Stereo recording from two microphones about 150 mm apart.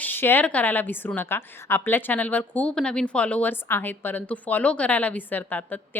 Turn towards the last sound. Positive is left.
turn(degrees=10)  # may be behind; listen again after turning